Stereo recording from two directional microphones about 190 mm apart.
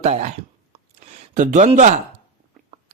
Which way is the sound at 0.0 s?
35° right (ahead or behind).